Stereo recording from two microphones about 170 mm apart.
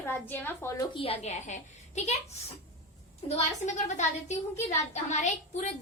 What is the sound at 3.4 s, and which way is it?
A woman's voice, 45° left (ahead or behind).